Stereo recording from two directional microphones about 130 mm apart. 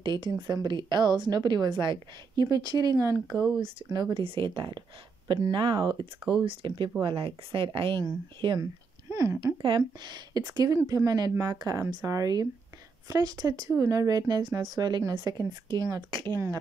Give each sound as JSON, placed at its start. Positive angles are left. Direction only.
{"t": 0.0, "sound": "a woman's voice", "side_deg": -35}
{"t": 3.3, "sound": "speech", "side_deg": -5}
{"t": 3.9, "sound": "a woman's voice", "side_deg": -35}
{"t": 9.1, "sound": "a sound", "side_deg": -25}
{"t": 9.6, "sound": "a woman's voice", "side_deg": -35}